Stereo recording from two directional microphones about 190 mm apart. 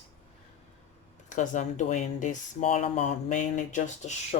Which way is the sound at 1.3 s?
40° left (ahead or behind).